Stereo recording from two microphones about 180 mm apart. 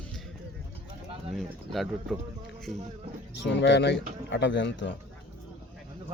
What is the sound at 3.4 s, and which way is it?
Speech, 80° left.